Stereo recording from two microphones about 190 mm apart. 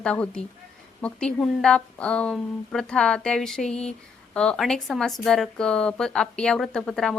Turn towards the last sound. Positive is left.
turn(degrees=5)  # may be behind; listen again after turning